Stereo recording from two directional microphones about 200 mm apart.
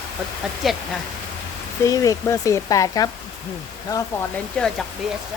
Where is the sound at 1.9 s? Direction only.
15° left (ahead or behind).